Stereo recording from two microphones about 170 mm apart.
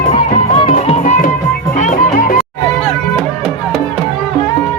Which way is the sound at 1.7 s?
50° left (ahead or behind).